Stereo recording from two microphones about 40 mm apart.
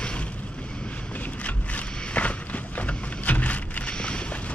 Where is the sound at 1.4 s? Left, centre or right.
Left.